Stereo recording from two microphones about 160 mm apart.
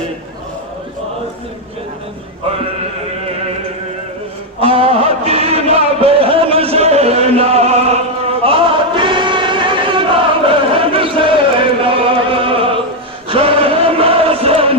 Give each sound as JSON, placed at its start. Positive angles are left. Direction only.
{"t": 4.6, "sound": "music", "side_deg": -35}
{"t": 13.2, "sound": "chant", "side_deg": -35}